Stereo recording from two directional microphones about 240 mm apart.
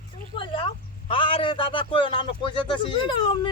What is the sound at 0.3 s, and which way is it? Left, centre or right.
A man's voice, left.